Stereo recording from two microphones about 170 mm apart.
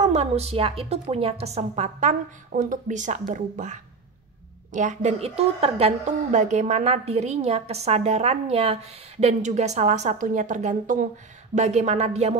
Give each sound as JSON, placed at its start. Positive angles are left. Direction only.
{"t": 0.0, "sound": "a woman's voice", "side_deg": -40}